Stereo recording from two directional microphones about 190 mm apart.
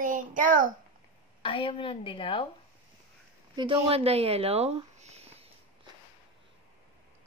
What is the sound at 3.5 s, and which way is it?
Speech, 25° right (ahead or behind).